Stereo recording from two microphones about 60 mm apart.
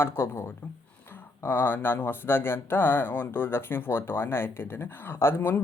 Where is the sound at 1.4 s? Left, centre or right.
Left.